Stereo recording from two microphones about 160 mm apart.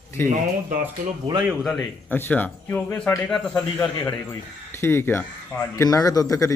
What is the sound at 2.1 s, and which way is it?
A man's voice, 10° left (ahead or behind).